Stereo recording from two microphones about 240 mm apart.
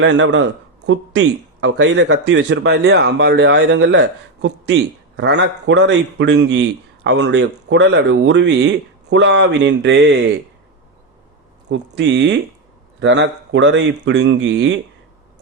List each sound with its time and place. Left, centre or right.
0.0 s speech: right
11.7 s speech: right